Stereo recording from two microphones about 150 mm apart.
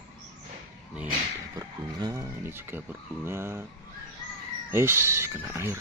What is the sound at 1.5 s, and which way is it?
Speech, 20° right (ahead or behind).